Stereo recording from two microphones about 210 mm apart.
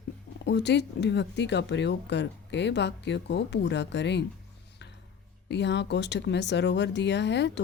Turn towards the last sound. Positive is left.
turn(degrees=55)  # may be behind; listen again after turning